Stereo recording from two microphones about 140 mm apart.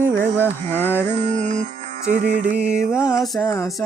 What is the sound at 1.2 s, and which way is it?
Music, 55° right (ahead or behind).